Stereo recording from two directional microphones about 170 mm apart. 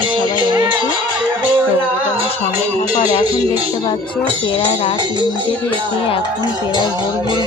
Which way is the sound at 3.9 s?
30° left (ahead or behind).